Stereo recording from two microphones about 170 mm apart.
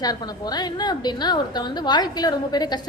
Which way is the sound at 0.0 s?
25° left (ahead or behind).